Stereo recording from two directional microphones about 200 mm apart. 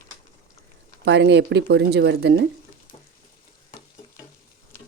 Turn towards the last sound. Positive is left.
turn(degrees=25)  # may be behind; listen again after turning